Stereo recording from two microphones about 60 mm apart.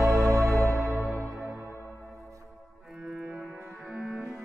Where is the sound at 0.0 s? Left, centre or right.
Right.